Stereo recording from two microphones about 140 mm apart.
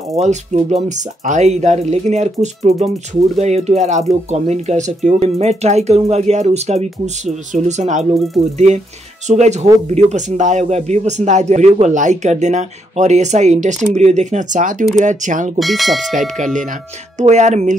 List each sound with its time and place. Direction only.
0.1 s a man's voice: 50° right (ahead or behind)
15.6 s speech: centre (ahead or behind)
16.2 s a man's voice: 65° right (ahead or behind)